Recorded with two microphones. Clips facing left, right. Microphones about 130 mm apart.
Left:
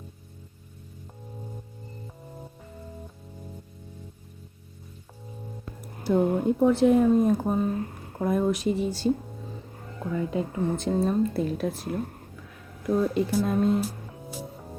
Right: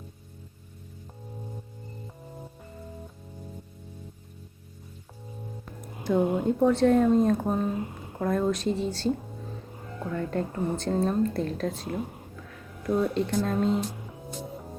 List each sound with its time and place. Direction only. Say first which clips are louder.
6.1 s speech: left 1 dB; 15° right (ahead or behind)
6.8 s a woman's voice: left 1 dB; 10° left (ahead or behind)
11.9 s speech: left 1 dB; 5° right (ahead or behind)